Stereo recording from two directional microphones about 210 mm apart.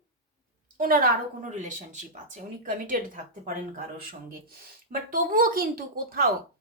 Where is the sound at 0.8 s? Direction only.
40° right (ahead or behind).